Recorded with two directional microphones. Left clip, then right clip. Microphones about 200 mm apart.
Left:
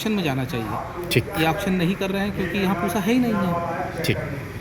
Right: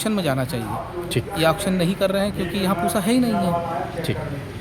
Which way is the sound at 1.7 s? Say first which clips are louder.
Right 4 dB; 20° right (ahead or behind).